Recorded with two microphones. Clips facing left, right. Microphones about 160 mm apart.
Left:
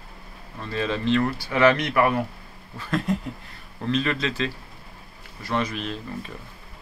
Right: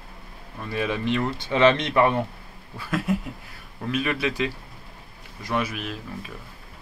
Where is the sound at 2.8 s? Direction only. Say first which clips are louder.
Even; 10° right (ahead or behind).